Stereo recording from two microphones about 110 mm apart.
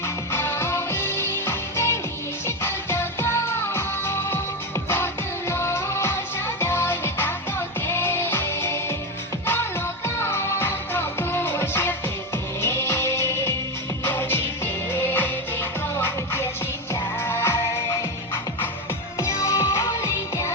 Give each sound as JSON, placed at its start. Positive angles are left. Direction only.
{"t": 0.3, "sound": "music", "side_deg": 25}
{"t": 19.2, "sound": "music", "side_deg": 25}